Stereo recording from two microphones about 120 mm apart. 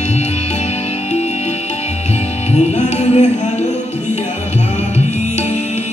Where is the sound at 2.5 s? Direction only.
70° left (ahead or behind).